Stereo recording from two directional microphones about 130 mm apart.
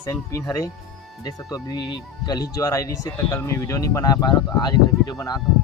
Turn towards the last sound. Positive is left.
turn(degrees=30)  # may be behind; listen again after turning